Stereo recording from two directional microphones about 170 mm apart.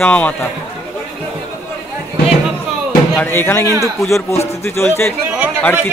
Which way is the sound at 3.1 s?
10° left (ahead or behind).